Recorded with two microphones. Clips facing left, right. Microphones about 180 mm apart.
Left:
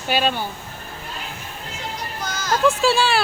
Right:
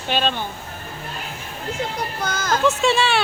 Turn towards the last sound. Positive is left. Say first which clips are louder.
# even
turn(degrees=0)  # may be behind; listen again after turning